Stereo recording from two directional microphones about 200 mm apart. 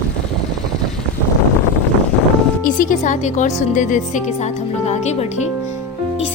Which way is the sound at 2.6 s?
40° left (ahead or behind).